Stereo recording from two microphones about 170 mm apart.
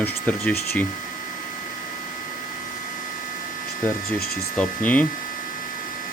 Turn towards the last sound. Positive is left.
turn(degrees=10)  # may be behind; listen again after turning